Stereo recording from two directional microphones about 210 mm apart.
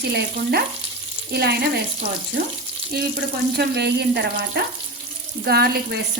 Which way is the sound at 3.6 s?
50° right (ahead or behind).